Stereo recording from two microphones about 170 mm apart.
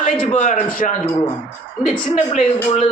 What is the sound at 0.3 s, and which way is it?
Speech, 45° left (ahead or behind).